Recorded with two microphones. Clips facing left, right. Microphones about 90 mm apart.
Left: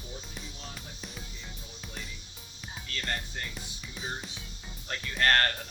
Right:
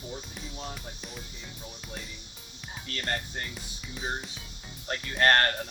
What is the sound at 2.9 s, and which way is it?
Speech, 40° right (ahead or behind).